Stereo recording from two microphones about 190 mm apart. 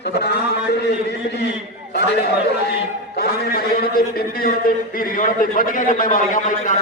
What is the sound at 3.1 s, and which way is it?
A man's voice, 55° left (ahead or behind).